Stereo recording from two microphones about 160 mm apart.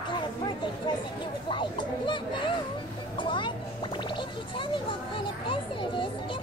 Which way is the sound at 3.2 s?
30° left (ahead or behind).